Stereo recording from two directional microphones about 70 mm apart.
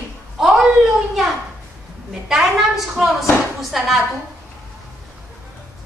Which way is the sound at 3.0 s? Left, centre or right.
Centre.